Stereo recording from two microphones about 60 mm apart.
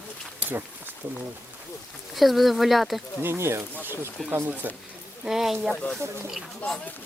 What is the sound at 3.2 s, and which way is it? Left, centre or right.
Speech, right.